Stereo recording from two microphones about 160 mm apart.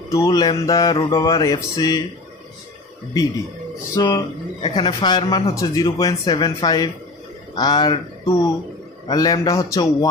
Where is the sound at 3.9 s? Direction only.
25° left (ahead or behind).